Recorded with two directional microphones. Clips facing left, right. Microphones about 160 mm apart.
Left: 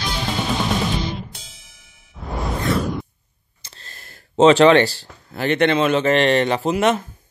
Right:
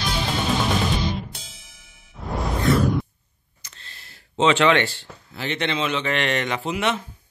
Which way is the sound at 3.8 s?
45° left (ahead or behind).